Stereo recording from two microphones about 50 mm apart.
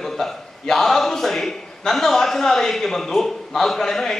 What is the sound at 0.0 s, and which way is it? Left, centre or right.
A man's voice, centre.